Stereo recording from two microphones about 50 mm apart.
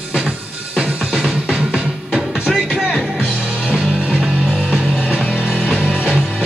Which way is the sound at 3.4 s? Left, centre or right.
Right.